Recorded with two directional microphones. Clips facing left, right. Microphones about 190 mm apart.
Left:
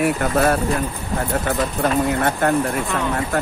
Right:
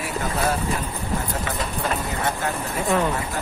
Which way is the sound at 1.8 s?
60° left (ahead or behind).